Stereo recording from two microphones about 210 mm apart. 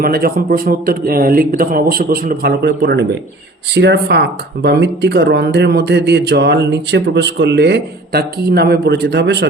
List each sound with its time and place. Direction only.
0.0 s a man's voice: 45° right (ahead or behind)